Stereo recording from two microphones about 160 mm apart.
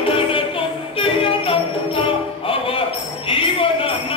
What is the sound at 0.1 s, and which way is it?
Music, 35° left (ahead or behind).